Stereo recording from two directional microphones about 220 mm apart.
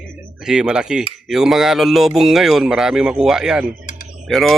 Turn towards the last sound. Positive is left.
turn(degrees=0)  # may be behind; listen again after turning